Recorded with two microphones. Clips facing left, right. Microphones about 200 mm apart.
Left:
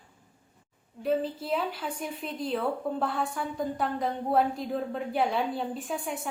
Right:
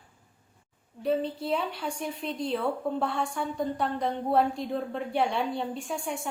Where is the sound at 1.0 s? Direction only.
Centre (ahead or behind).